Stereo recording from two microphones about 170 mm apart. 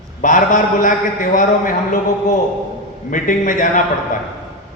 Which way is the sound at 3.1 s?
50° left (ahead or behind).